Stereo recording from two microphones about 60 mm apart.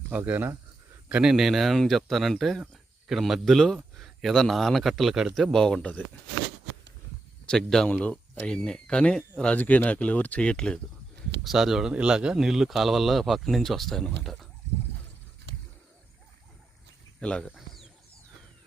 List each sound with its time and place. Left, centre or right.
0.1 s speech: right
1.2 s a man's voice: centre
7.4 s speech: centre
7.9 s speech: left
11.4 s a man's voice: centre
17.2 s speech: centre